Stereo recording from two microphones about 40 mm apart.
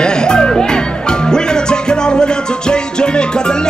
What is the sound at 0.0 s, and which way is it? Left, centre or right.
Music, centre.